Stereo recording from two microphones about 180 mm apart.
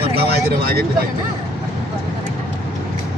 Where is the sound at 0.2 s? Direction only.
60° right (ahead or behind).